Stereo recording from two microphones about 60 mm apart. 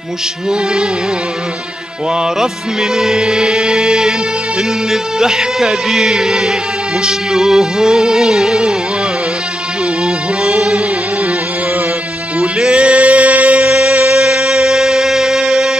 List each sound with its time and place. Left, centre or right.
2.1 s music: centre
10.0 s music: centre
12.4 s music: centre